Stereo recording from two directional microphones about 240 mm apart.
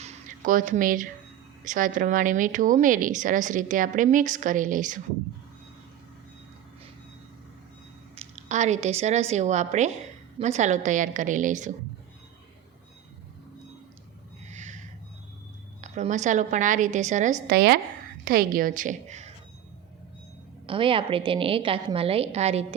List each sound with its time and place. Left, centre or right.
0.0 s a sound: right
1.6 s speech: right
8.1 s a woman's voice: right
14.5 s a sound: right
15.8 s speech: right
20.7 s a woman's voice: right